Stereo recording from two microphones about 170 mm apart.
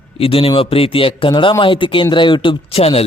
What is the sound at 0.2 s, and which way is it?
A man's voice, 35° left (ahead or behind).